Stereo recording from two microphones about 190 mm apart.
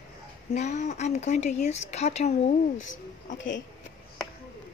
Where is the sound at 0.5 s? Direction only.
35° left (ahead or behind).